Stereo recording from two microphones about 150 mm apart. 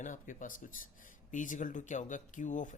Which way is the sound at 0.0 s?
60° left (ahead or behind).